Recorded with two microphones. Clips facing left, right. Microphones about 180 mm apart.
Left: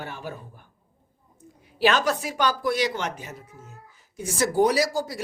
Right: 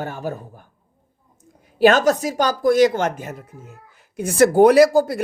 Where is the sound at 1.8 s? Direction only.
45° right (ahead or behind).